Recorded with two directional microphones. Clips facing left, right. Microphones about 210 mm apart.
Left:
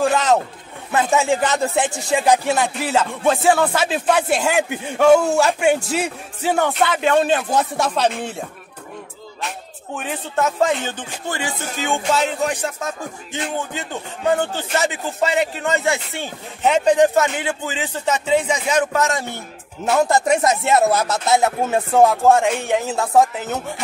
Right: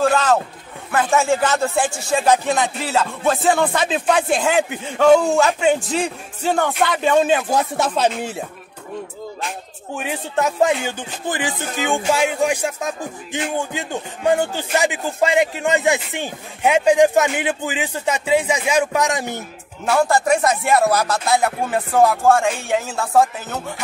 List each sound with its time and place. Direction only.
0.0 s speech: 20° left (ahead or behind); by 8.5 s 5° right (ahead or behind)
9.9 s speech: 15° right (ahead or behind)
19.8 s speech: 20° left (ahead or behind)